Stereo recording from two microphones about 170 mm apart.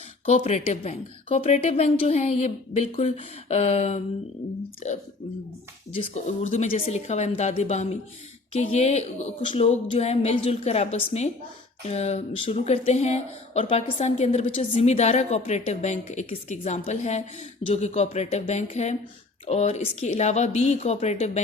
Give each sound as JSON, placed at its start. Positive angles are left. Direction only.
{"t": 0.3, "sound": "speech", "side_deg": 40}
{"t": 5.9, "sound": "speech", "side_deg": 40}